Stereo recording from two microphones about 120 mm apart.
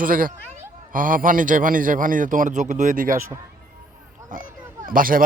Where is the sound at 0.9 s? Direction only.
90° right.